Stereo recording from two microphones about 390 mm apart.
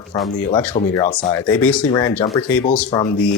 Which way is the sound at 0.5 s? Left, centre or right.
Centre.